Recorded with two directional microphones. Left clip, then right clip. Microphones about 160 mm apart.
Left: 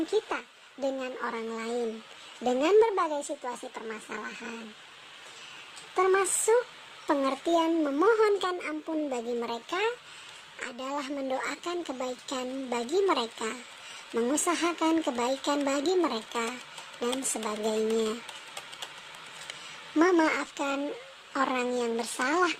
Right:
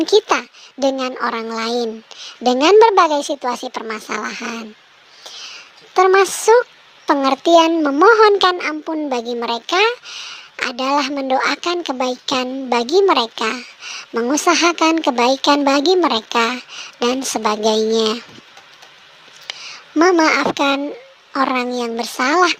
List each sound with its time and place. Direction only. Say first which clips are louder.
0.0 s speech: right 15 dB; 50° right (ahead or behind)
5.9 s a woman's voice: right 13 dB; 40° right (ahead or behind)
20.0 s a woman's voice: right 11 dB; 35° right (ahead or behind)